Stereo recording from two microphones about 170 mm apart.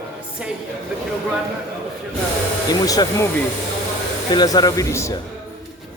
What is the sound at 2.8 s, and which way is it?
Speech, 20° left (ahead or behind).